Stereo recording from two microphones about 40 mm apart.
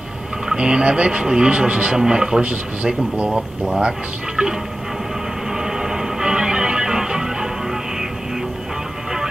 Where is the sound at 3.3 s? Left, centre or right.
Centre.